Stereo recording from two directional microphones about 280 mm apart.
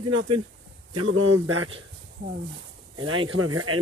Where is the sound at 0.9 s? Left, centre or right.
Right.